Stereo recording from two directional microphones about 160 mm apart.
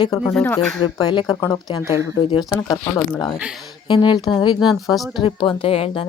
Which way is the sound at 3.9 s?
30° left (ahead or behind).